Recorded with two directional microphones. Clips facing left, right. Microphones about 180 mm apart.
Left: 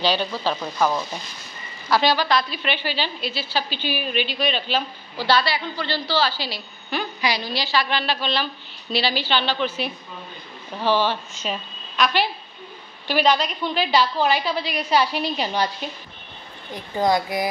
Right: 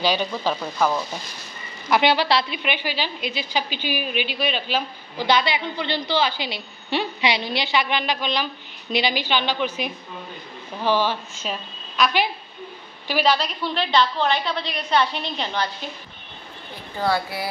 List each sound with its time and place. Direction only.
0.0 s a woman's voice: 10° right (ahead or behind)
0.6 s a woman's voice: 5° left (ahead or behind)
1.9 s a woman's voice: 20° right (ahead or behind)
2.6 s a woman's voice: 10° right (ahead or behind)
10.9 s a woman's voice: 10° right (ahead or behind); by 15.7 s 10° left (ahead or behind)
17.0 s a woman's voice: 15° left (ahead or behind)